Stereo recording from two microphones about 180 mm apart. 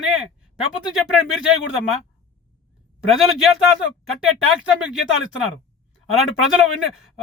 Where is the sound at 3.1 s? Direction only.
Centre (ahead or behind).